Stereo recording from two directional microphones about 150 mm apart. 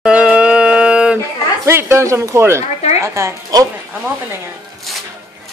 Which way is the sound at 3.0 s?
20° right (ahead or behind).